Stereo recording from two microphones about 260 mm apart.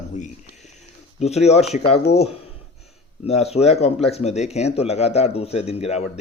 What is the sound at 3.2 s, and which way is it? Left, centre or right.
Speech, left.